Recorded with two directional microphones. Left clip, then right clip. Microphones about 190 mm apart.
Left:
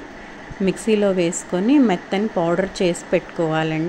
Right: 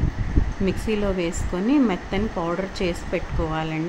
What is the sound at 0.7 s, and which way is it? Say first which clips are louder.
A woman's voice: left 7 dB; 20° left (ahead or behind).